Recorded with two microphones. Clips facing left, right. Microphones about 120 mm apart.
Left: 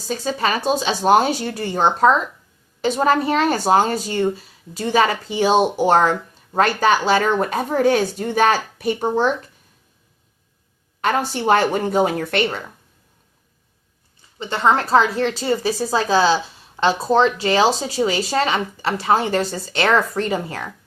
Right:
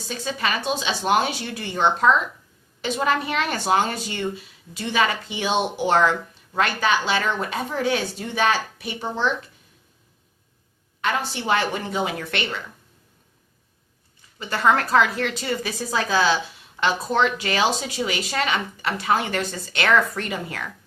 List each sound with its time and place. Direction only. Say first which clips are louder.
0.1 s a woman's voice: left 5 dB; 40° left (ahead or behind)
11.0 s a woman's voice: left 6 dB; 40° left (ahead or behind)
14.3 s a woman's voice: left 2 dB; 25° left (ahead or behind)